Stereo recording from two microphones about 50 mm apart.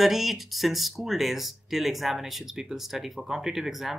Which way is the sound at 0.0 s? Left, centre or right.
Centre.